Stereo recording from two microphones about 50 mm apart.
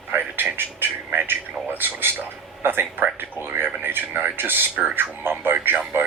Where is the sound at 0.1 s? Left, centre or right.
Right.